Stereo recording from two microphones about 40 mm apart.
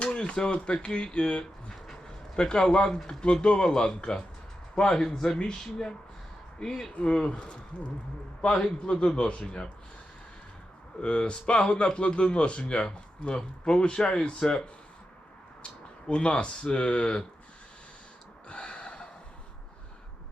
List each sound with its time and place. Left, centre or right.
0.0 s a man's voice: left
11.0 s speech: left
18.4 s gasp: left